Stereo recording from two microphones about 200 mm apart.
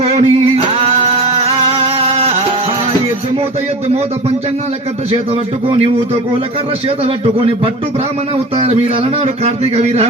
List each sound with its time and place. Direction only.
0.0 s a sound: 30° right (ahead or behind)
6.8 s a man's voice: 30° right (ahead or behind)
9.2 s speech: 30° right (ahead or behind)